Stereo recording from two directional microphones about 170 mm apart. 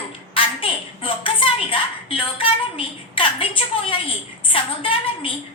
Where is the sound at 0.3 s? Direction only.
30° left (ahead or behind).